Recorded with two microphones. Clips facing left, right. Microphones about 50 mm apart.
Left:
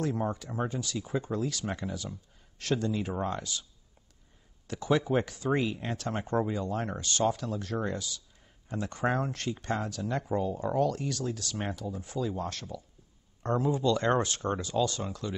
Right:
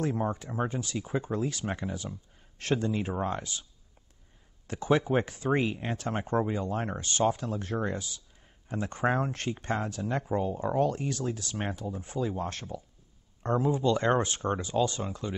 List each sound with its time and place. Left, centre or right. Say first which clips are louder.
0.0 s speech: right 1 dB; right
4.6 s speech: right 1 dB; right